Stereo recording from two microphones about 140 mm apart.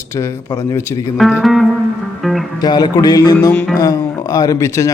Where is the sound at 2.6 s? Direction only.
30° left (ahead or behind).